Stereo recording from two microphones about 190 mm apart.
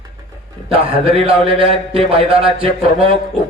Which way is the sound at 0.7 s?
30° right (ahead or behind).